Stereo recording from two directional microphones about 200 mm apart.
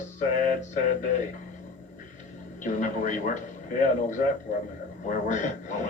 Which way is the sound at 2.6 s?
40° left (ahead or behind).